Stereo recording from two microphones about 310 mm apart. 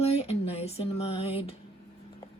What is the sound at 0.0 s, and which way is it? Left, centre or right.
Music, centre.